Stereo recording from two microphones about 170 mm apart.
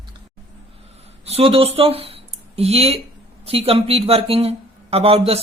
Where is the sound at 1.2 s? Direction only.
35° right (ahead or behind).